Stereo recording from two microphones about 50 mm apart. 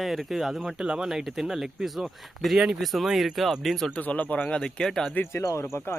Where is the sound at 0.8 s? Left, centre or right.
Centre.